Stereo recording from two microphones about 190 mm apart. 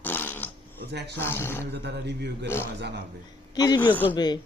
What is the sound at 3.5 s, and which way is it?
Speech, 20° left (ahead or behind).